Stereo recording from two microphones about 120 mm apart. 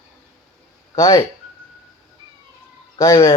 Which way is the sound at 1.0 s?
30° left (ahead or behind).